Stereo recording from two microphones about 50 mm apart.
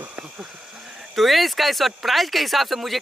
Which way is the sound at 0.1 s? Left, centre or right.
Right.